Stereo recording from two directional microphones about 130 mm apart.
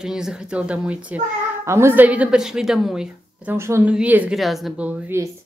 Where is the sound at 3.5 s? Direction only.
20° right (ahead or behind); by 4.9 s centre (ahead or behind).